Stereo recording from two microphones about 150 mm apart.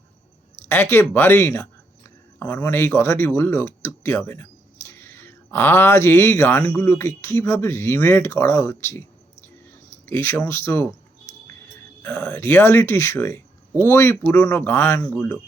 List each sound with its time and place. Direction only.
0.7 s speech: 15° left (ahead or behind)
12.0 s speech: 15° left (ahead or behind)